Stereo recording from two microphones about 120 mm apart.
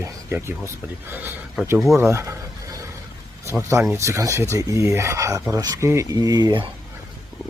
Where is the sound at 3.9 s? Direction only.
25° right (ahead or behind).